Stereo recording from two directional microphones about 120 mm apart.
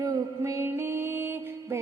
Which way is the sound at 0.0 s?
25° right (ahead or behind).